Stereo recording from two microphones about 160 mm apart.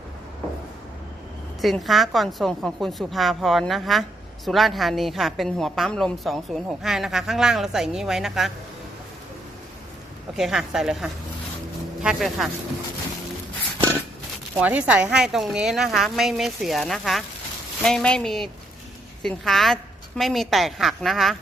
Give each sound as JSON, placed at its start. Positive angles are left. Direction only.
{"t": 1.6, "sound": "a woman's voice", "side_deg": 0}
{"t": 10.3, "sound": "a woman's voice", "side_deg": 0}
{"t": 14.6, "sound": "a woman's voice", "side_deg": -10}